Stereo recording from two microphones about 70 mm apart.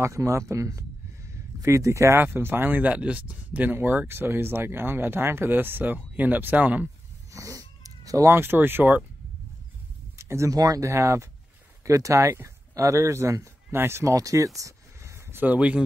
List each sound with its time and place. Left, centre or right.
0.0 s speech: right
2.1 s speech: right
7.3 s cat: right
8.3 s speech: right
10.1 s a sound: right
10.5 s speech: right
12.7 s speech: right
14.1 s speech: right
15.3 s speech: right